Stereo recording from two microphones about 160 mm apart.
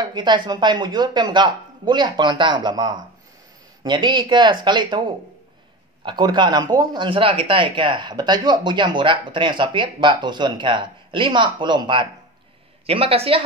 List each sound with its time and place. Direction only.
0.0 s speech: 30° right (ahead or behind)